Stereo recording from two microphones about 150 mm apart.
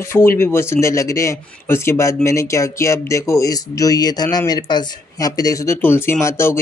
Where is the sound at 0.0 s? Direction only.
15° left (ahead or behind).